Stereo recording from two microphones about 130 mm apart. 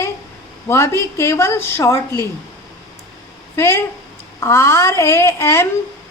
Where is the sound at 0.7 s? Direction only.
20° left (ahead or behind).